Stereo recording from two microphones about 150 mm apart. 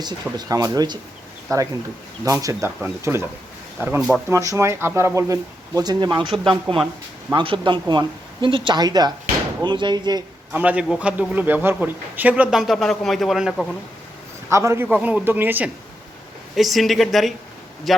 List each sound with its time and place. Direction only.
0.0 s speech: 25° right (ahead or behind)
6.3 s speech: centre (ahead or behind)
7.3 s speech: 35° right (ahead or behind)
10.5 s speech: 10° right (ahead or behind)
14.5 s speech: 20° right (ahead or behind)
16.6 s speech: centre (ahead or behind)